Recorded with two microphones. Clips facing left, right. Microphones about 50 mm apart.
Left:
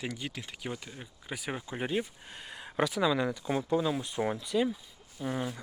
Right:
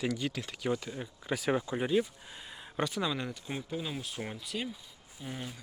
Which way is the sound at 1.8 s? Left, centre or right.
Left.